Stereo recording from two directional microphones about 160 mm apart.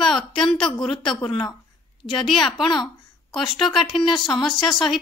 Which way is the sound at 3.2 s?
30° left (ahead or behind).